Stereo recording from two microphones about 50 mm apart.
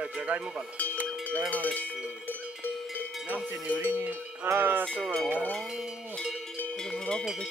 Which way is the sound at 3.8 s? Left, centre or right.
Right.